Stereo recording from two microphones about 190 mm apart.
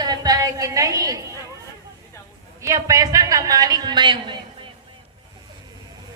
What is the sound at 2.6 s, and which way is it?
Speech, 15° right (ahead or behind).